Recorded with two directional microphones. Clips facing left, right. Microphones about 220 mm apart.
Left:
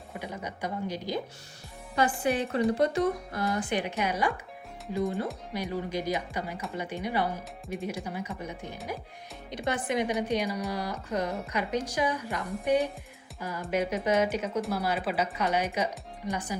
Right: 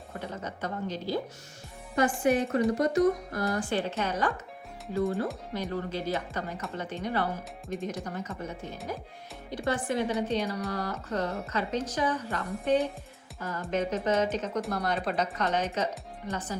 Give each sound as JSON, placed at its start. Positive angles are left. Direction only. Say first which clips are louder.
{"t": 0.1, "sound": "a woman's voice", "louder": "even", "side_deg": 15}
{"t": 2.0, "sound": "speech", "louder": "right 2 dB", "side_deg": 30}
{"t": 3.5, "sound": "a woman's voice", "louder": "even", "side_deg": 20}
{"t": 5.5, "sound": "a woman's voice", "louder": "left 2 dB", "side_deg": 15}